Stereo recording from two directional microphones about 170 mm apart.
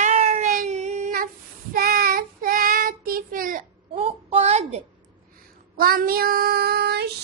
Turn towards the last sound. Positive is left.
turn(degrees=-75)  # may be behind; listen again after turning